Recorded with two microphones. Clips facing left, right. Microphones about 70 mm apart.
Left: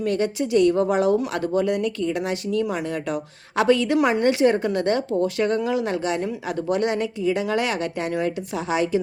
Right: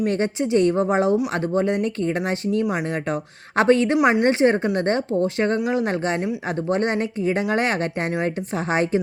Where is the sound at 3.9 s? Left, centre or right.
Right.